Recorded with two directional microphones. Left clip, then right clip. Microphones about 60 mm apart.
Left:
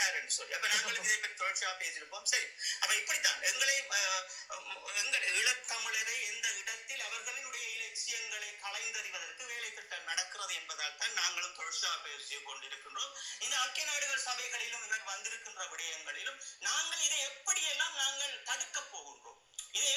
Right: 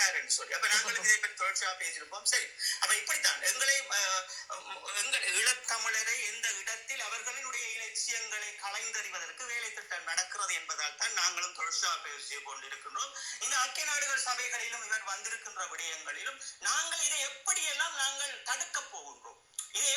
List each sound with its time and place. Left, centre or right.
0.0 s a man's voice: centre
5.0 s speech: right